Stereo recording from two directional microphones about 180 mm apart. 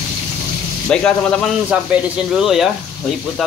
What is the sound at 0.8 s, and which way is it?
Speech, 5° left (ahead or behind).